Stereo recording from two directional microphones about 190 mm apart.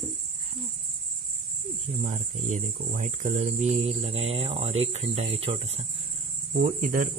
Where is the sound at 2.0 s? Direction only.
40° right (ahead or behind).